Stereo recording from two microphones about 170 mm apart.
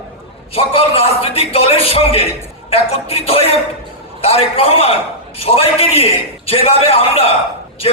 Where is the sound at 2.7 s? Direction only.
35° left (ahead or behind).